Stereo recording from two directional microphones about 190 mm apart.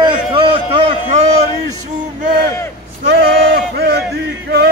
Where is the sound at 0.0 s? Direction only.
25° right (ahead or behind).